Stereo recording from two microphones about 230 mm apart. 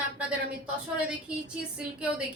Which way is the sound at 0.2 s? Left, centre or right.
Centre.